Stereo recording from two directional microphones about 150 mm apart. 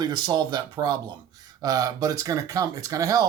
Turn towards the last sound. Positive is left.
turn(degrees=-25)  # may be behind; listen again after turning